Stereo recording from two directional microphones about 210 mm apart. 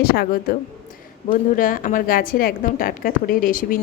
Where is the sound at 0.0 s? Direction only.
45° left (ahead or behind).